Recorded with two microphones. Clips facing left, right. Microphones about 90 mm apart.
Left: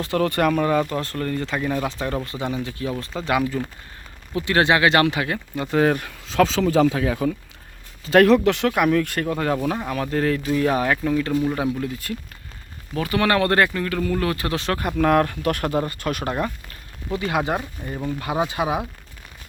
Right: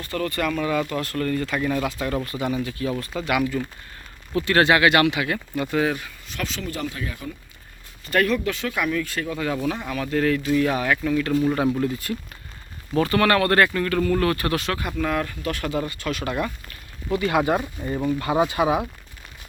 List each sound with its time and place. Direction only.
0.0 s speech: 70° left (ahead or behind)
0.4 s speech: 45° left (ahead or behind)
5.8 s speech: 55° left (ahead or behind)
6.6 s speech: 90° left; by 9.6 s 45° left (ahead or behind)
9.6 s speech: 35° left (ahead or behind)
11.8 s speech: centre (ahead or behind)
13.0 s speech: 15° left (ahead or behind)
13.8 s speech: 10° left (ahead or behind)
14.5 s speech: 35° left (ahead or behind)
14.8 s speech: 50° left (ahead or behind)
17.2 s speech: 20° left (ahead or behind)